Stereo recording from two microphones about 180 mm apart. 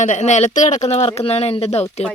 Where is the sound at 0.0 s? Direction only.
40° left (ahead or behind).